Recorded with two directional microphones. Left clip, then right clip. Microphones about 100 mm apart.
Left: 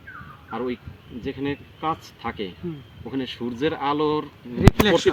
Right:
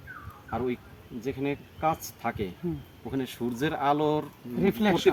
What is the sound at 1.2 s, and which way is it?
Speech, 35° right (ahead or behind).